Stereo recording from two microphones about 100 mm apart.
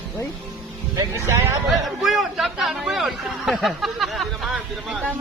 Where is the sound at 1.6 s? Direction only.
Centre (ahead or behind).